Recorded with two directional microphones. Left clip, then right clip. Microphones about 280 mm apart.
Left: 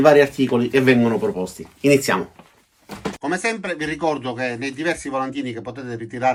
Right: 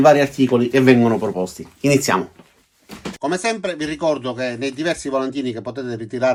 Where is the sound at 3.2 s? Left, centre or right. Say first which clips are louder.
Right 3 dB; centre.